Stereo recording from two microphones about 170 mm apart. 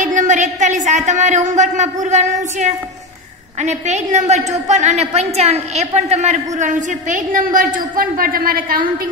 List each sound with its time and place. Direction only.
0.0 s a woman's voice: 50° right (ahead or behind)